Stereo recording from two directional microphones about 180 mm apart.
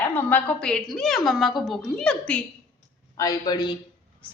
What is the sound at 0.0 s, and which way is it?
A woman's voice, 10° left (ahead or behind).